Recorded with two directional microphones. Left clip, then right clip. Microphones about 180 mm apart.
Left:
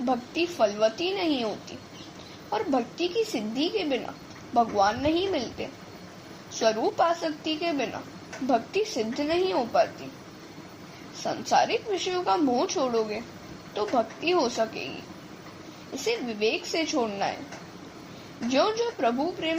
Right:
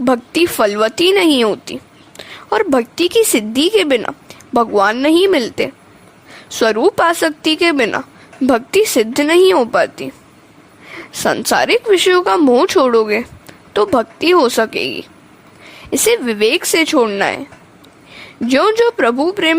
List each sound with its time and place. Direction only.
0.0 s speech: 60° right (ahead or behind)
11.2 s speech: 60° right (ahead or behind)
15.9 s speech: 55° right (ahead or behind)
18.4 s speech: 65° right (ahead or behind)